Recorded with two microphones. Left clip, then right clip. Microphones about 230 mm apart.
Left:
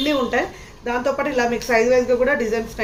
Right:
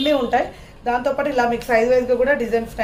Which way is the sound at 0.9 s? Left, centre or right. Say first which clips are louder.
Right 1 dB; right.